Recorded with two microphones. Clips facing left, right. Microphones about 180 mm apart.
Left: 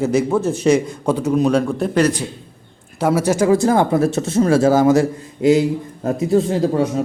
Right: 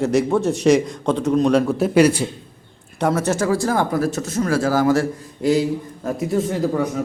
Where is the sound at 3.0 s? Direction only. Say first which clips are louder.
Left 3 dB; 10° left (ahead or behind).